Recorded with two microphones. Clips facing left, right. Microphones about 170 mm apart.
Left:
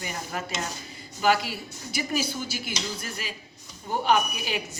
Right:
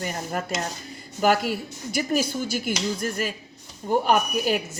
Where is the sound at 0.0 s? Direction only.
50° right (ahead or behind).